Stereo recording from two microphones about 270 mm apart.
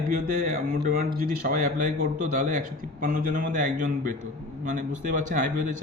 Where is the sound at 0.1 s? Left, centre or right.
Right.